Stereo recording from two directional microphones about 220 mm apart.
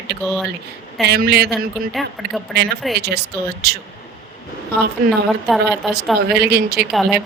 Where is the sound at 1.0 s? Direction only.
45° right (ahead or behind).